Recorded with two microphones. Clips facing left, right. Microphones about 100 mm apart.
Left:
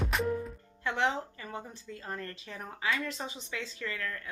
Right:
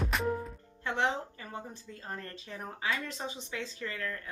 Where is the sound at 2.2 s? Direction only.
35° right (ahead or behind).